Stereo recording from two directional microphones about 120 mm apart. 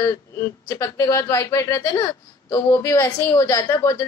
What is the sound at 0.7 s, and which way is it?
Speech, 25° left (ahead or behind).